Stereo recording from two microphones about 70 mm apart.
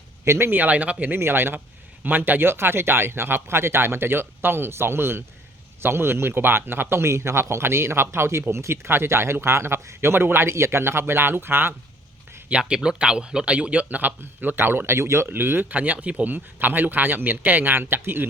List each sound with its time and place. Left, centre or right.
0.3 s speech: right
1.1 s speech: right
12.5 s speech: centre; by 18.3 s right